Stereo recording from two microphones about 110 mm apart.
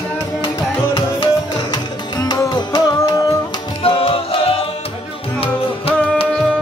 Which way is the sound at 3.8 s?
55° left (ahead or behind).